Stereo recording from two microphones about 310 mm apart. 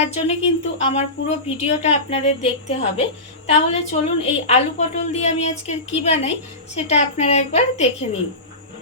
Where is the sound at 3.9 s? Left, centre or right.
Left.